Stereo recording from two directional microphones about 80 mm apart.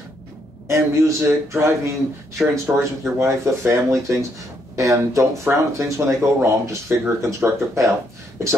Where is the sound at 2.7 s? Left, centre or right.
Centre.